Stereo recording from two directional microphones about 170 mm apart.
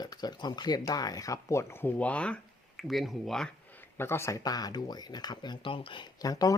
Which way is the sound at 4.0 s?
15° left (ahead or behind).